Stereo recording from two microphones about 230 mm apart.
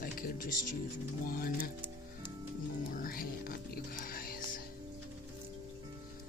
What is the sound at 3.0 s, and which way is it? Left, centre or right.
Music, left.